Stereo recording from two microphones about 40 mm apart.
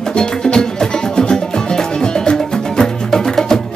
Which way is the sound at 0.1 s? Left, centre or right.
Centre.